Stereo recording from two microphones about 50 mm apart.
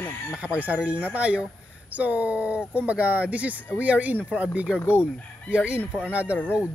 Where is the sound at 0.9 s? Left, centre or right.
Right.